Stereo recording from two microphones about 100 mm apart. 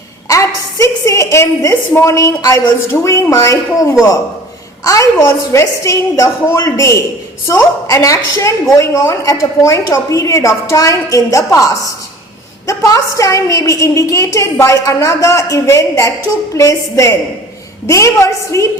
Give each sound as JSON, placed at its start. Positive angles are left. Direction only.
{"t": 0.3, "sound": "a woman's voice", "side_deg": 30}